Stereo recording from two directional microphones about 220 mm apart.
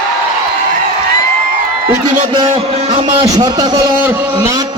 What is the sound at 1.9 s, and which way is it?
A man's voice, 20° right (ahead or behind).